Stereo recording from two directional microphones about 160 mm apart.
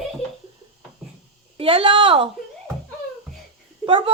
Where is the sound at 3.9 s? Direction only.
35° right (ahead or behind).